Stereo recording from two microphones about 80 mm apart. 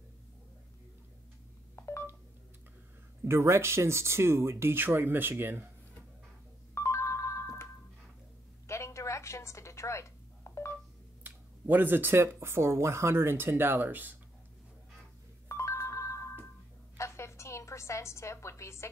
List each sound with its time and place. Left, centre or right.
1.8 s telephone dialing: left
3.3 s speech: right
6.7 s ringtone: left
8.6 s a sound: left
11.2 s speech: right
15.4 s ringtone: left
16.9 s a sound: left